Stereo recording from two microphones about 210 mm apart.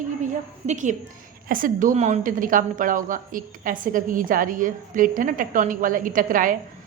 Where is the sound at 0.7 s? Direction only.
35° right (ahead or behind).